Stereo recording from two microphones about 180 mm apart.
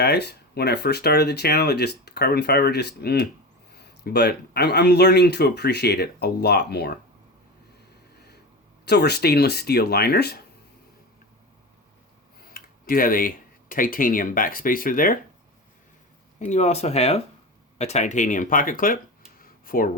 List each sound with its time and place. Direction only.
0.0 s speech: 65° left (ahead or behind)
8.9 s speech: 65° left (ahead or behind)
12.5 s speech: 55° left (ahead or behind)
16.4 s speech: 40° left (ahead or behind)
19.4 s a sound: 50° left (ahead or behind)